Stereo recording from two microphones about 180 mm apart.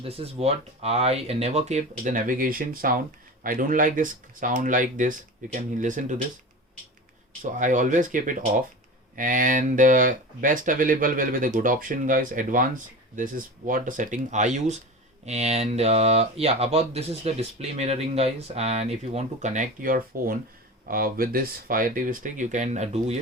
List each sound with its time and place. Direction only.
0.0 s speech: 35° right (ahead or behind)
7.6 s speech: 45° right (ahead or behind)